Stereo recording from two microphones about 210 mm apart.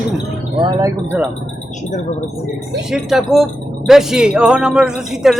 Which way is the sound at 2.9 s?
Centre (ahead or behind).